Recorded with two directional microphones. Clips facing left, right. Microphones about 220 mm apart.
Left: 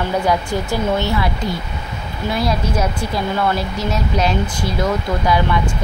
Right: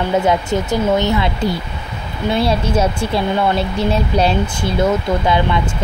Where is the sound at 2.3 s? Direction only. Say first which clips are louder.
Right 3 dB; 30° right (ahead or behind).